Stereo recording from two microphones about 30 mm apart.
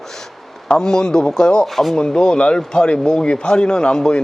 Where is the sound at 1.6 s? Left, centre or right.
Centre.